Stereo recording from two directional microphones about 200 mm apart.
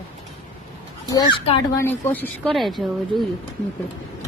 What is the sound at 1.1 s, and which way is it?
Speech, 25° left (ahead or behind).